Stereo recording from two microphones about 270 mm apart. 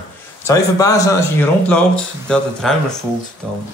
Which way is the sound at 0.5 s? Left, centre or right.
Centre.